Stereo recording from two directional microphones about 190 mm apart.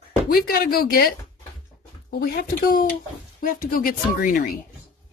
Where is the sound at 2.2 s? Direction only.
50° left (ahead or behind).